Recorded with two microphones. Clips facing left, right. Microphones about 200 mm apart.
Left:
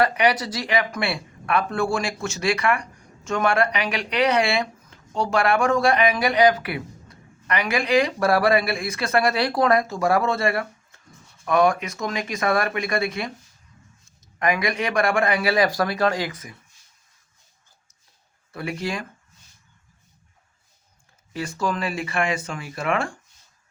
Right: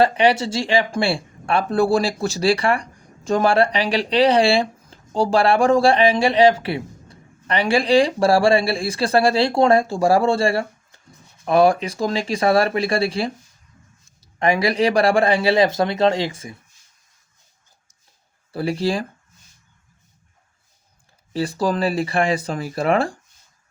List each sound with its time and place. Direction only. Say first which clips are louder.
0.0 s speech: right 4 dB; 30° right (ahead or behind)
18.5 s speech: right 7 dB; 35° right (ahead or behind)
21.3 s speech: right 5 dB; 35° right (ahead or behind)